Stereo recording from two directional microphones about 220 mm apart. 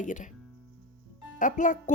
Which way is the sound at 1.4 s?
35° left (ahead or behind).